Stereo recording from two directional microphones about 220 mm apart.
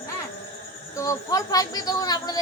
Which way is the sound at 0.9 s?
15° left (ahead or behind).